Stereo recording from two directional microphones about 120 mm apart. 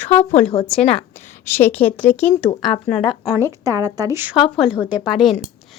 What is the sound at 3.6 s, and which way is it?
Speech, 30° right (ahead or behind).